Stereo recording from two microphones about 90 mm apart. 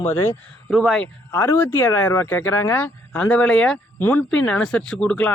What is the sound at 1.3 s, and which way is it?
A man's voice, 25° left (ahead or behind).